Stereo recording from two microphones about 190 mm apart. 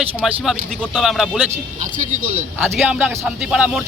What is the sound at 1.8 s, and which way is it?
Speech, 40° right (ahead or behind).